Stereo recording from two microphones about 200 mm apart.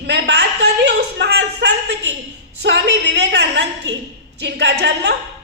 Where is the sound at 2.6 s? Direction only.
60° right (ahead or behind).